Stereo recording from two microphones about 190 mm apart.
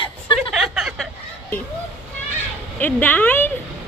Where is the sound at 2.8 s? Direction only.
10° left (ahead or behind).